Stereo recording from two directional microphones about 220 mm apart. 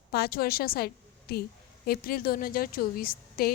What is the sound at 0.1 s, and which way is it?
Speech, 45° left (ahead or behind).